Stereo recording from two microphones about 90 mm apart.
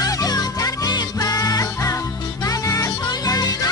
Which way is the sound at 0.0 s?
45° left (ahead or behind).